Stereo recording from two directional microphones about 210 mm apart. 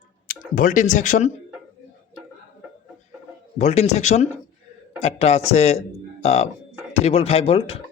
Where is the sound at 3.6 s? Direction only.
30° left (ahead or behind).